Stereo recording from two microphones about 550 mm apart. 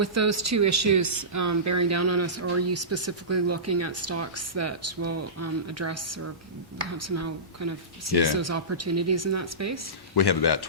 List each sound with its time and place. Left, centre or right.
0.0 s speech: right
10.2 s speech: left